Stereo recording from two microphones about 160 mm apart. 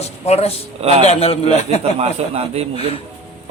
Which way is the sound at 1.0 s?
40° left (ahead or behind).